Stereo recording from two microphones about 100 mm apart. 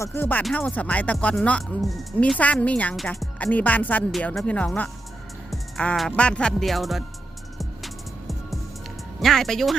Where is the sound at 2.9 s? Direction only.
Centre (ahead or behind).